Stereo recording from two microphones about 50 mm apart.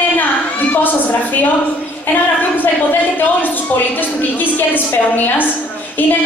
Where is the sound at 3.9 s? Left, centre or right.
Left.